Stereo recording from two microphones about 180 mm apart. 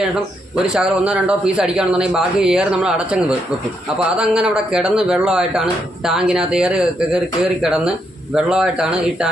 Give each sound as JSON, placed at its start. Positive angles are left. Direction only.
{"t": 0.7, "sound": "speech", "side_deg": -5}